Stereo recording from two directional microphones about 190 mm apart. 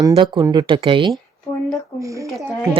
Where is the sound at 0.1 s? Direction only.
25° right (ahead or behind).